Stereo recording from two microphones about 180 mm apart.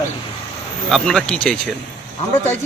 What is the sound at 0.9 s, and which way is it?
Speech, 5° left (ahead or behind).